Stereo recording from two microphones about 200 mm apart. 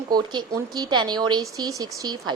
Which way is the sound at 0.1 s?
20° right (ahead or behind).